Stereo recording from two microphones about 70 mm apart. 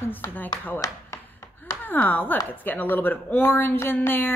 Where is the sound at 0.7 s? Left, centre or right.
Left.